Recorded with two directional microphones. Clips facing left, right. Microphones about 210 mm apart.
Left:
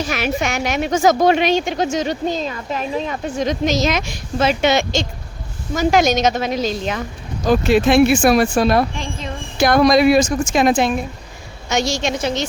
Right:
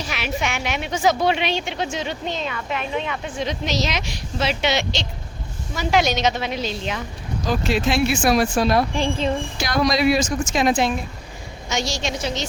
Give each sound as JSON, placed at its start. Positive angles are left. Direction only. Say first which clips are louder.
{"t": 0.1, "sound": "speech", "louder": "left 5 dB", "side_deg": 45}
{"t": 7.4, "sound": "speech", "louder": "left 7 dB", "side_deg": 55}
{"t": 9.0, "sound": "speech", "louder": "right 6 dB", "side_deg": -30}
{"t": 9.6, "sound": "speech", "louder": "left 10 dB", "side_deg": 55}